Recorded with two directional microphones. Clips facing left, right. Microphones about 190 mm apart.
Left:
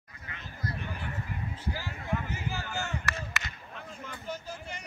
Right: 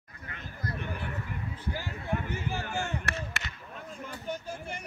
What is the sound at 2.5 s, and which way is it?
Chop, 55° right (ahead or behind).